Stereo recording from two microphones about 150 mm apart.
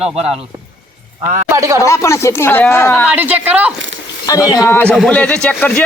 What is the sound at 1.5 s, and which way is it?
Speech, 20° right (ahead or behind).